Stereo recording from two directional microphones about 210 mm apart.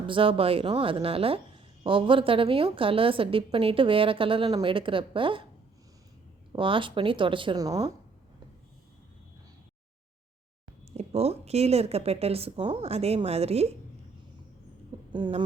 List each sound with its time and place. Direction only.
0.1 s a woman's voice: 25° right (ahead or behind)
6.6 s a woman's voice: 25° right (ahead or behind)
10.9 s a woman's voice: 30° right (ahead or behind)
15.1 s a woman's voice: 20° right (ahead or behind)